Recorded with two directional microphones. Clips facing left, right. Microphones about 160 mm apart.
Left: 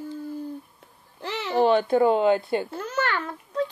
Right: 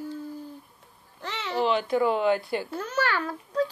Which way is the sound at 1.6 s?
50° left (ahead or behind).